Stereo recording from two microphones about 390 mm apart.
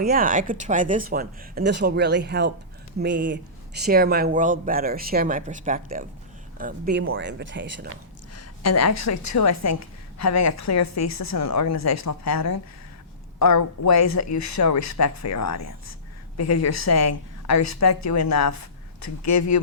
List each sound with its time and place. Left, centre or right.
0.0 s speech: right
8.4 s a woman's voice: left